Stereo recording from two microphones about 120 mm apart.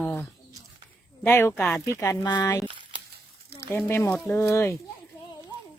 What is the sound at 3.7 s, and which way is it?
Speech, 15° left (ahead or behind).